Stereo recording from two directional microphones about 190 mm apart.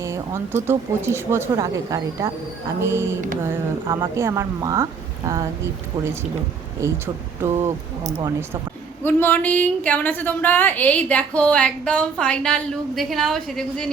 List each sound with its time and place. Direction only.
0.0 s speech: 15° right (ahead or behind)
6.8 s speech: 15° right (ahead or behind)
9.0 s a woman's voice: 10° left (ahead or behind)